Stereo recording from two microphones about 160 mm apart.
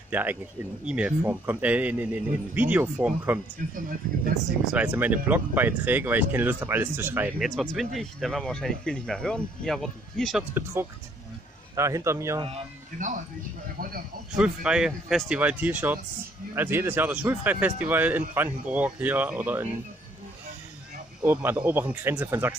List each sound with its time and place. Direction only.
0.1 s speech: 10° right (ahead or behind)
4.7 s speech: 10° right (ahead or behind)
7.3 s speech: centre (ahead or behind)
10.5 s speech: 15° right (ahead or behind)
13.7 s speech: 65° right (ahead or behind)
14.3 s speech: 5° right (ahead or behind)
21.2 s speech: 10° right (ahead or behind)